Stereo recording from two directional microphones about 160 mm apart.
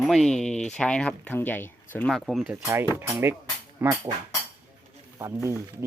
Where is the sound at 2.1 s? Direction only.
Centre (ahead or behind).